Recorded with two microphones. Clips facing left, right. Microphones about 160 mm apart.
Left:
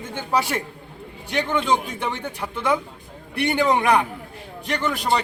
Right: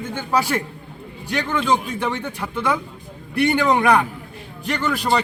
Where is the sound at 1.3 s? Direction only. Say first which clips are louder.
Right 1 dB; 20° left (ahead or behind).